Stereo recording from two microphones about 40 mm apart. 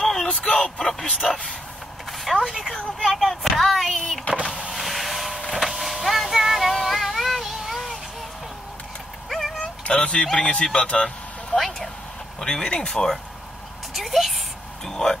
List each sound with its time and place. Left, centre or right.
0.0 s a sound: centre
0.3 s a sound: left
0.6 s a man's voice: centre
1.2 s speech: centre
2.4 s a woman's voice: centre
3.0 s speech: centre
4.3 s power windows: left
4.7 s vehicle: centre
6.7 s child singing: centre
9.8 s speech: left
11.5 s speech: centre
13.9 s speech: centre
14.9 s speech: centre